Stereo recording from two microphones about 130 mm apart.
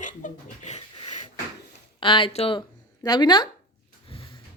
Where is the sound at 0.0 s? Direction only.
75° left (ahead or behind).